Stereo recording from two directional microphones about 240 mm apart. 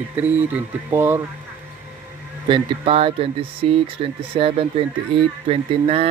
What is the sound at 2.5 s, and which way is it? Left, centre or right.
Speech, right.